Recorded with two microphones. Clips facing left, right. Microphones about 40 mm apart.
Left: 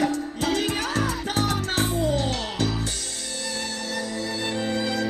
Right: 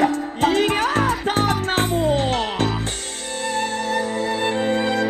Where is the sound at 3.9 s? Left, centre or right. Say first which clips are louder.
Right 6 dB; right.